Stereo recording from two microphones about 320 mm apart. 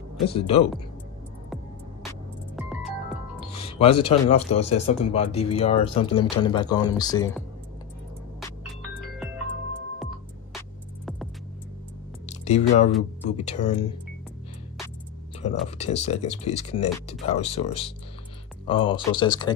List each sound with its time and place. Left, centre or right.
0.3 s speech: centre
2.5 s music: centre
3.5 s speech: centre
8.4 s music: centre
12.3 s speech: left
15.8 s speech: centre